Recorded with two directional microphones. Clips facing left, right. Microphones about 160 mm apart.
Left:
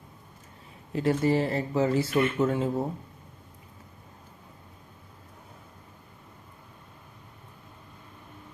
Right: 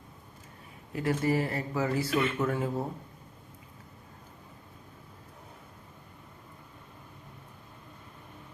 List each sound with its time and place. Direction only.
0.9 s speech: 25° left (ahead or behind)